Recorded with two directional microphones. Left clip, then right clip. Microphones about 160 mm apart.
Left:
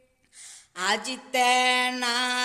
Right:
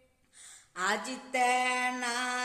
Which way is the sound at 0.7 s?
15° left (ahead or behind).